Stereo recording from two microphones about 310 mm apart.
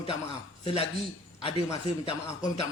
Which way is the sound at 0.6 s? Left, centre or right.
Centre.